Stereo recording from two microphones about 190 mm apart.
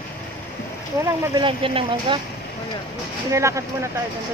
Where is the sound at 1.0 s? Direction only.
15° right (ahead or behind).